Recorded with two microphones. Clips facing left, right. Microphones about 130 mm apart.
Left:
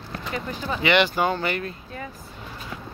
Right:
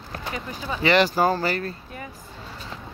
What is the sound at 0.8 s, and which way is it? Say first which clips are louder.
Speech: right 2 dB; 35° right (ahead or behind).